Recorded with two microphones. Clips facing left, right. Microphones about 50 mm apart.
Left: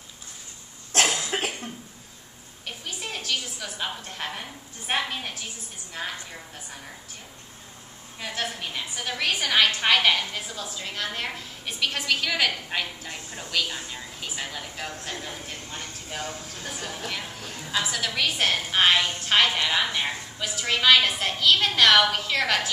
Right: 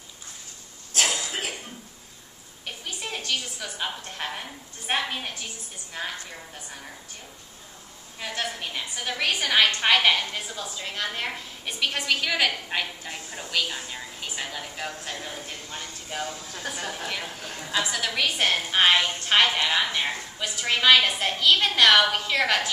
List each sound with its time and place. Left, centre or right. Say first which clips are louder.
0.9 s cough: left 3 dB; left
2.6 s a woman's voice: even; centre
8.2 s a woman's voice: even; centre